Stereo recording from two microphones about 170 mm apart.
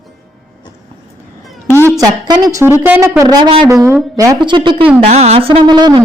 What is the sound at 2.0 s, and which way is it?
Speech, 20° right (ahead or behind).